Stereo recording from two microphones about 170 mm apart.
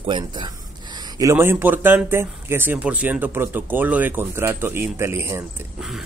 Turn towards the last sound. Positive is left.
turn(degrees=-15)  # may be behind; listen again after turning